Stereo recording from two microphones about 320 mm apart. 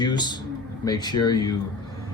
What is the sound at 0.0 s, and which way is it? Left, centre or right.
Speech, centre.